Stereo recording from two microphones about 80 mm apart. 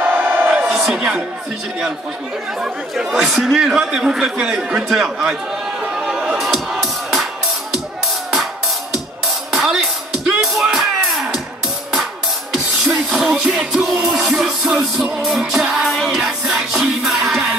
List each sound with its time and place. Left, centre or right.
0.0 s a sound: right
0.7 s a sound: centre
2.6 s speech: centre
5.9 s music: centre
10.1 s music: centre
12.5 s music: centre